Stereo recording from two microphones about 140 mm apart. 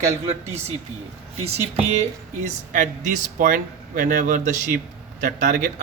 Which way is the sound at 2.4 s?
60° right (ahead or behind).